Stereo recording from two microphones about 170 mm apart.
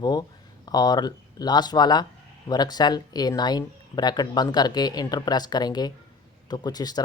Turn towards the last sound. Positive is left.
turn(degrees=25)  # may be behind; listen again after turning